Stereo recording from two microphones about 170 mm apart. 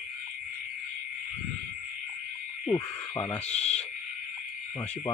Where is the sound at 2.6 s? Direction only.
25° left (ahead or behind).